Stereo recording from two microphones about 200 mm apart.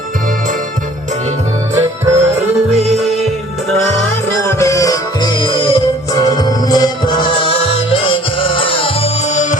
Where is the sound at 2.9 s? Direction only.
Centre (ahead or behind).